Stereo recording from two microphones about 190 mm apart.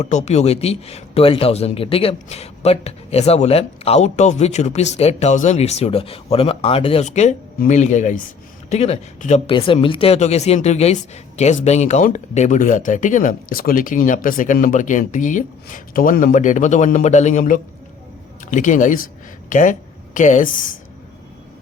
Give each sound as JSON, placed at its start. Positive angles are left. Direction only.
{"t": 0.0, "sound": "speech", "side_deg": 35}